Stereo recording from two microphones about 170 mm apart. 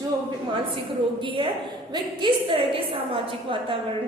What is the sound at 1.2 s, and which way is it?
A woman's voice, 30° right (ahead or behind).